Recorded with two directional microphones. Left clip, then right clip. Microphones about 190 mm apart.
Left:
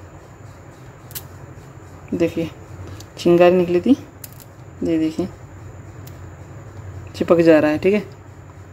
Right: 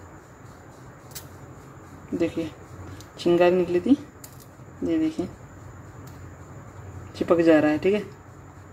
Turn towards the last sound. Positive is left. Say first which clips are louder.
# left 5 dB
turn(degrees=10)  # may be behind; listen again after turning